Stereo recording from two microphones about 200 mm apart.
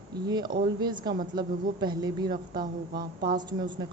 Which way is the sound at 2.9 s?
45° right (ahead or behind).